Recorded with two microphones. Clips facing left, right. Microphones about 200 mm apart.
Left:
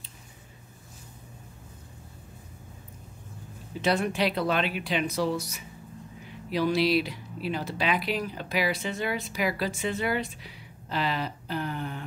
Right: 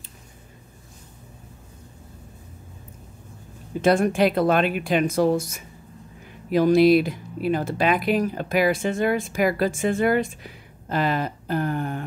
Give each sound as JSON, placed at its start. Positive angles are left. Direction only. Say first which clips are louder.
{"t": 3.8, "sound": "speech", "louder": "right 7 dB", "side_deg": -50}